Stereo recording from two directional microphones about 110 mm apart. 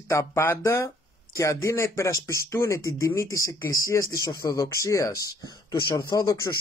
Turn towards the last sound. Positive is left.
turn(degrees=35)  # may be behind; listen again after turning